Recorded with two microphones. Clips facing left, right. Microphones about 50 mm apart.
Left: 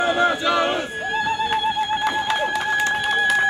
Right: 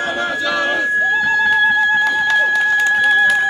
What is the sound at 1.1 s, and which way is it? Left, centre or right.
Music, centre.